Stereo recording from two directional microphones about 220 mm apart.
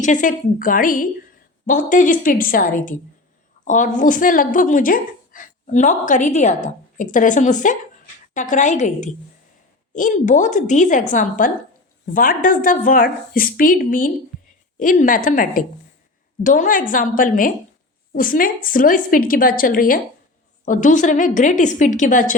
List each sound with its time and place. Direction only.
0.0 s a woman's voice: 35° left (ahead or behind)
14.3 s a sound: centre (ahead or behind)
14.8 s a woman's voice: 35° left (ahead or behind)